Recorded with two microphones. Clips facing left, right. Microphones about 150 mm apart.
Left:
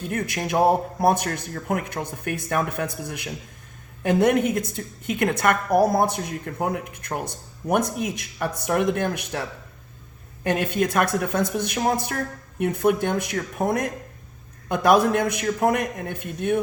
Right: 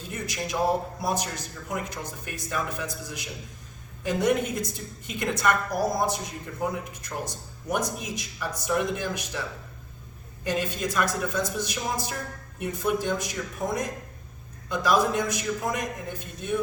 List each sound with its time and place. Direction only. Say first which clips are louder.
0.1 s a woman's voice: left 6 dB; 55° left (ahead or behind)